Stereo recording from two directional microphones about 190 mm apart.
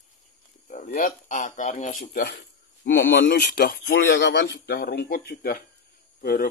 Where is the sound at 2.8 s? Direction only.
75° left (ahead or behind).